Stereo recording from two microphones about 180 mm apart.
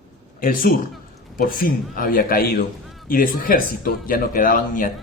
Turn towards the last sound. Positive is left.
turn(degrees=50)  # may be behind; listen again after turning